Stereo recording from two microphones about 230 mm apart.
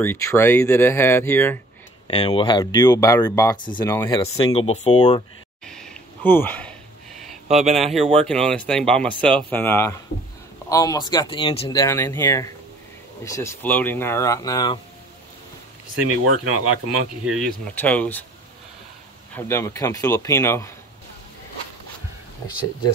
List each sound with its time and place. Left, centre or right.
0.0 s speech: centre
2.0 s speech: left
4.5 s speech: left
5.7 s a sound: centre
7.4 s speech: right
7.7 s speech: centre
16.3 s speech: right
17.2 s speech: centre
19.3 s speech: centre